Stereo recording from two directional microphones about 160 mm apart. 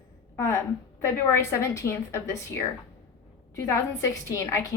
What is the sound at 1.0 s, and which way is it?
A woman's voice, 15° left (ahead or behind).